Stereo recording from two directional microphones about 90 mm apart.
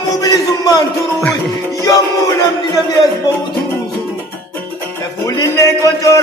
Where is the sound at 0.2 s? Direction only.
40° left (ahead or behind).